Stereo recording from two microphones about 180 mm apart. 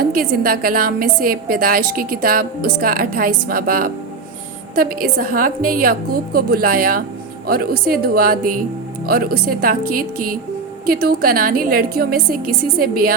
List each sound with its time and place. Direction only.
0.0 s a woman's voice: 50° right (ahead or behind)